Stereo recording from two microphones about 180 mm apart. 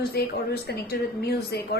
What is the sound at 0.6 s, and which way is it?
Speech, 60° left (ahead or behind).